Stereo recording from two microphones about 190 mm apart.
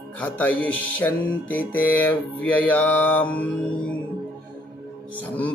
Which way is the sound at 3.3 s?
10° left (ahead or behind).